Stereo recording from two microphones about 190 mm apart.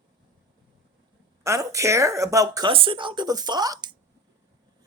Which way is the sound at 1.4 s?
15° right (ahead or behind).